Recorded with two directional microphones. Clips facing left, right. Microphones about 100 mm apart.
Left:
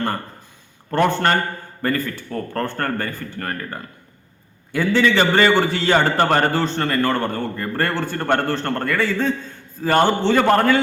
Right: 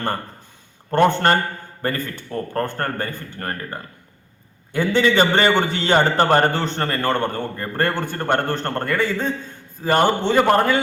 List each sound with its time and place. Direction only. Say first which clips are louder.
0.9 s a man's voice: right 2 dB; 30° right (ahead or behind)
4.7 s a man's voice: even; 20° right (ahead or behind)